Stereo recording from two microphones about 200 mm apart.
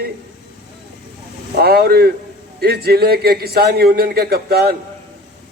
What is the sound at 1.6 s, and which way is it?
A man's voice, 50° right (ahead or behind).